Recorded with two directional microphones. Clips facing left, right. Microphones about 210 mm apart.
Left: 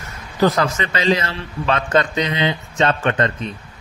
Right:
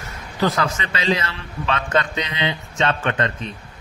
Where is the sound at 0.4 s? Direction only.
40° left (ahead or behind).